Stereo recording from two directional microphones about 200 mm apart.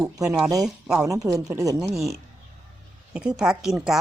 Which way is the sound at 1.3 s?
15° right (ahead or behind).